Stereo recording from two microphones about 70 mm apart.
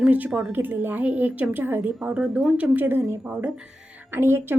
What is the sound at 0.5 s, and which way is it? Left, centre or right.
A woman's voice, right.